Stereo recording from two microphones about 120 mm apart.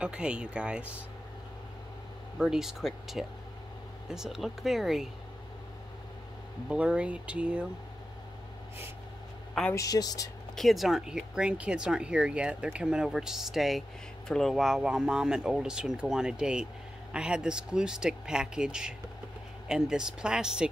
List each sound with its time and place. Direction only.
0.0 s speech: 10° right (ahead or behind)
2.3 s speech: 5° right (ahead or behind)
6.7 s speech: 10° right (ahead or behind)
9.8 s speech: 30° left (ahead or behind)
10.5 s speech: centre (ahead or behind)